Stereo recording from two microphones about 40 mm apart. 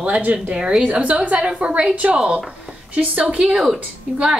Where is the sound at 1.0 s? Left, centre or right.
Right.